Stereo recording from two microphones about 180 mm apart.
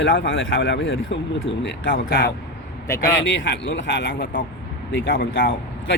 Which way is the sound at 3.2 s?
85° left.